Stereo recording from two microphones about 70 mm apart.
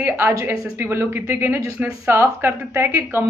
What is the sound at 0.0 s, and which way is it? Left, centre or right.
Speech, right.